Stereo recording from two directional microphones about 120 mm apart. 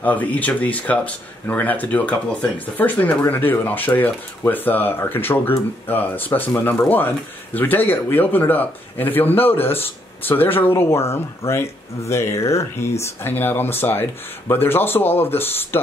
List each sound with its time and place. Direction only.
0.0 s speech: 15° left (ahead or behind)